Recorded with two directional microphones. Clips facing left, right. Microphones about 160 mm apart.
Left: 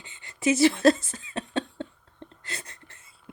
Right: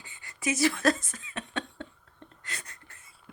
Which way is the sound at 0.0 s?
25° left (ahead or behind).